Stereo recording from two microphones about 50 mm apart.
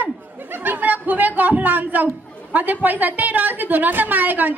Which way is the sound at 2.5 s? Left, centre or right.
Right.